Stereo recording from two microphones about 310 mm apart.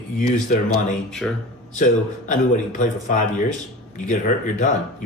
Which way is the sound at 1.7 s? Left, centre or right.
Left.